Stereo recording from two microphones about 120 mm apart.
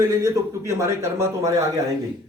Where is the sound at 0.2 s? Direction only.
25° right (ahead or behind).